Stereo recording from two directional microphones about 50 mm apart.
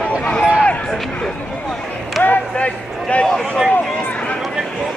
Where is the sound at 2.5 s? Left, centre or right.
Left.